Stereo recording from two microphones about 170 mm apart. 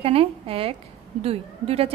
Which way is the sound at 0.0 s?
35° right (ahead or behind).